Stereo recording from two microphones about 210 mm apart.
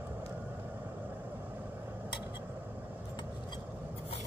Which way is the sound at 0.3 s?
10° right (ahead or behind).